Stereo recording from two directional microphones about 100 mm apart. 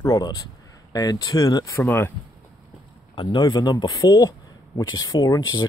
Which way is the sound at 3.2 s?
50° left (ahead or behind).